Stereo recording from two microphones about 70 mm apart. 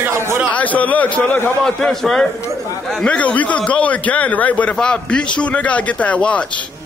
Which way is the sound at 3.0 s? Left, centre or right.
Centre.